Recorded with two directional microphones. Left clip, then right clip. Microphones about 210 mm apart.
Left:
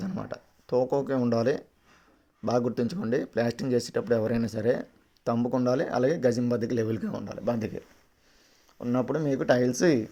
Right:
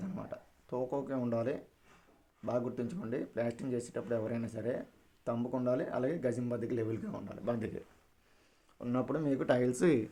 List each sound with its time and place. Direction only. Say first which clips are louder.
0.0 s speech: left 7 dB; 40° left (ahead or behind)
8.8 s speech: left 7 dB; 20° left (ahead or behind)